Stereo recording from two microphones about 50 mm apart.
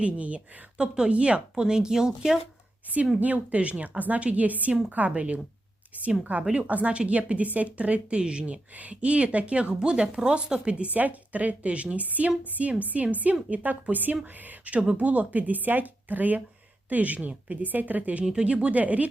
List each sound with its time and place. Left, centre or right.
0.0 s speech: right
3.2 s a woman's voice: right
6.5 s a woman's voice: right